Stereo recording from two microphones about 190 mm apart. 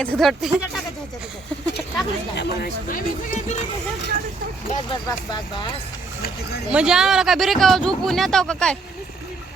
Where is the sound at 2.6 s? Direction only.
40° left (ahead or behind).